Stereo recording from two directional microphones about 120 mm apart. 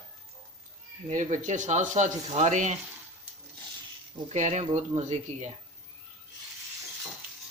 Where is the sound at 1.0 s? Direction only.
85° right.